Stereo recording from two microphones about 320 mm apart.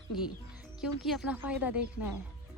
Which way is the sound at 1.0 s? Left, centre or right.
Centre.